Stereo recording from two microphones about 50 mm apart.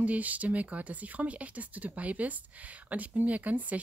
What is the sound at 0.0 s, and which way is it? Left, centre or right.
A woman's voice, right.